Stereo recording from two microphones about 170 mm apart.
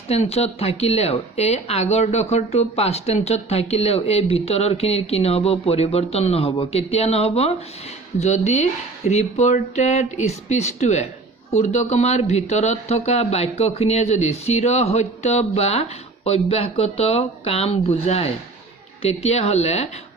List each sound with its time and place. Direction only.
0.1 s speech: 35° left (ahead or behind)